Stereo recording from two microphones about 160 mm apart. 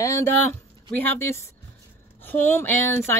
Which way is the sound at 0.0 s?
15° left (ahead or behind).